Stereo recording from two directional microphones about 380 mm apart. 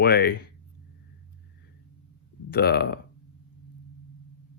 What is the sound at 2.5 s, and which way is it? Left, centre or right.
Speech, left.